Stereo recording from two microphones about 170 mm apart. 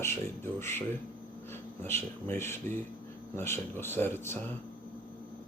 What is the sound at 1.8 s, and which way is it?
Speech, 15° left (ahead or behind).